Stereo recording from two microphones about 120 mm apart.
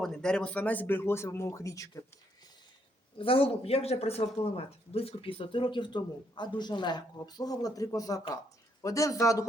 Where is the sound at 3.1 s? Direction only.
50° left (ahead or behind).